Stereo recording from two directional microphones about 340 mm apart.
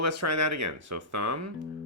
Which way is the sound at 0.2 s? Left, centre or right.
Right.